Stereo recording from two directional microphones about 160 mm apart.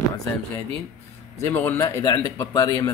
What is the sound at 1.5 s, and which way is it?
Speech, 10° left (ahead or behind).